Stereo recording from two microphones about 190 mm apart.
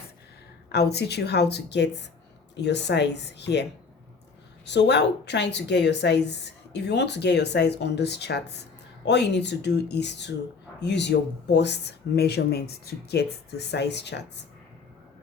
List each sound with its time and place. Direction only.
0.7 s speech: 60° left (ahead or behind)